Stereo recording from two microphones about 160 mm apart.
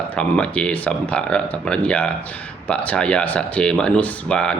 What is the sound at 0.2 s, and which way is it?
Speech, 5° left (ahead or behind).